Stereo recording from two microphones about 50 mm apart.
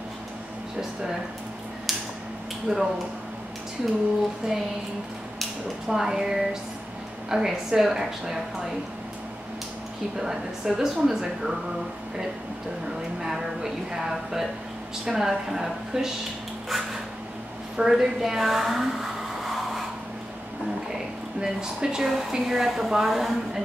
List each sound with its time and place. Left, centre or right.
1.9 s a sound: centre
2.7 s speech: centre
4.4 s speech: centre
5.9 s speech: centre
10.1 s speech: centre
13.2 s speech: centre
17.7 s a sound: centre
21.4 s speech: centre